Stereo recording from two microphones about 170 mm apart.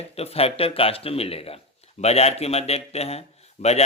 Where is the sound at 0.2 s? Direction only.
35° left (ahead or behind).